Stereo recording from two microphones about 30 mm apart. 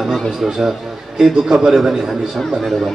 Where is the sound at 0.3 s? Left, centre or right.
Centre.